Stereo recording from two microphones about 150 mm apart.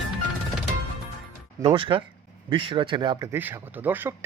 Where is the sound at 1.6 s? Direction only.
35° right (ahead or behind).